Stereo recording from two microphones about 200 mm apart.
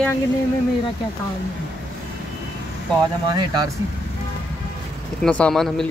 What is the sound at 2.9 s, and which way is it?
Speech, 20° right (ahead or behind).